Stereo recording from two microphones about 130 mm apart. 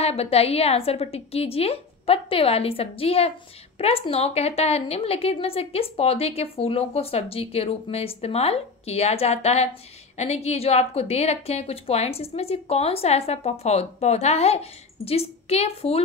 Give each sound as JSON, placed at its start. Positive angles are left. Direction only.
{"t": 0.0, "sound": "a woman's voice", "side_deg": 50}